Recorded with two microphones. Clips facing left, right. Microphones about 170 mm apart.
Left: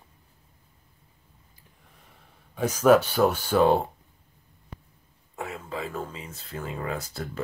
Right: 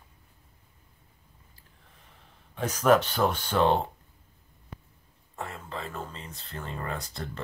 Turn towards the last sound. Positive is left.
turn(degrees=5)  # may be behind; listen again after turning